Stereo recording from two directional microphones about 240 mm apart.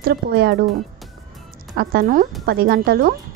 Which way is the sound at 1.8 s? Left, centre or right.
Right.